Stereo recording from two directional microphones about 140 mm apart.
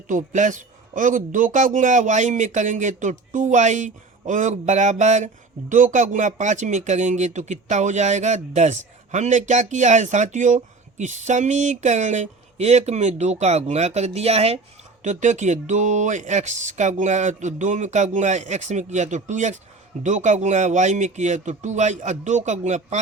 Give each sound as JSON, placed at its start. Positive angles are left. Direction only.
{"t": 0.1, "sound": "a man's voice", "side_deg": -65}
{"t": 15.0, "sound": "a man's voice", "side_deg": -60}